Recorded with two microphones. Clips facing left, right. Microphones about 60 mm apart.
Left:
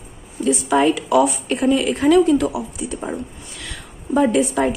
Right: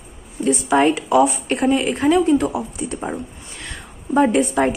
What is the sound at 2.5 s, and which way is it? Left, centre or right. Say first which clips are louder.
Speech: right 1 dB; right.